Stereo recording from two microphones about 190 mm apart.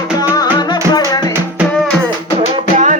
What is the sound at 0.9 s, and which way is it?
Music, 20° left (ahead or behind).